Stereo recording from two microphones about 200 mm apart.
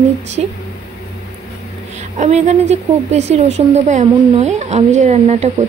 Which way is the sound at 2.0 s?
35° right (ahead or behind).